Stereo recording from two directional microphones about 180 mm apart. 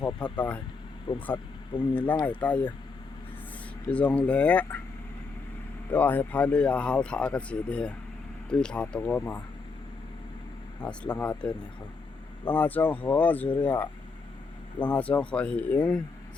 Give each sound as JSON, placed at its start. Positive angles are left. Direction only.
{"t": 0.2, "sound": "speech", "side_deg": 5}
{"t": 1.1, "sound": "speech", "side_deg": 25}
{"t": 2.0, "sound": "speech", "side_deg": 10}
{"t": 3.9, "sound": "speech", "side_deg": 5}
{"t": 5.9, "sound": "speech", "side_deg": 10}
{"t": 10.8, "sound": "speech", "side_deg": 5}